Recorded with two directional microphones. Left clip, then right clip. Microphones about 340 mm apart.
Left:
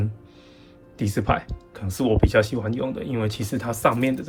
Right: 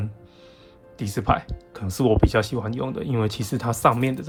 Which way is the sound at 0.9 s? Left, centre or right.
Centre.